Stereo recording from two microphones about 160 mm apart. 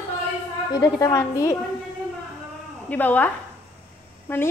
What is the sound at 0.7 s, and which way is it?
Speech, 20° left (ahead or behind).